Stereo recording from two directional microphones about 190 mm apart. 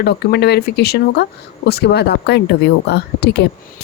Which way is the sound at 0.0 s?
60° left (ahead or behind).